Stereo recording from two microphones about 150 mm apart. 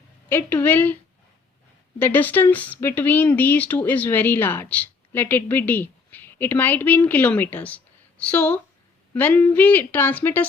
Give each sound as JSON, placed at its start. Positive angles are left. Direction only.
{"t": 0.3, "sound": "speech", "side_deg": 15}
{"t": 2.0, "sound": "speech", "side_deg": 10}